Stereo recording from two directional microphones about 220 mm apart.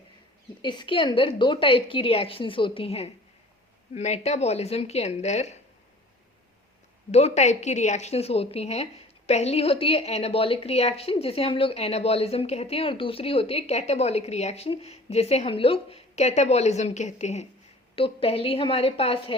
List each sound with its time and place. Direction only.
0.6 s a woman's voice: 20° left (ahead or behind)
7.1 s a woman's voice: 30° left (ahead or behind)